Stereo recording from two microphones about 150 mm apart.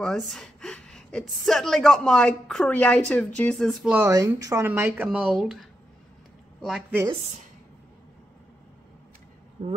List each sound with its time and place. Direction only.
0.3 s a woman's voice: 5° left (ahead or behind)
3.9 s speech: 20° right (ahead or behind)
6.9 s speech: 15° right (ahead or behind)
9.6 s speech: 40° right (ahead or behind)